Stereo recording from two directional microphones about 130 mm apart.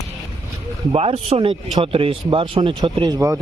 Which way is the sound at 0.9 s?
50° right (ahead or behind).